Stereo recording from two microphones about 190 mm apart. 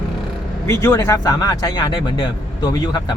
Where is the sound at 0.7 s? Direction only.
15° left (ahead or behind).